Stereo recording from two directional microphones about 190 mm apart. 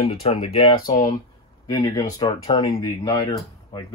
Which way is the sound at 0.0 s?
30° left (ahead or behind).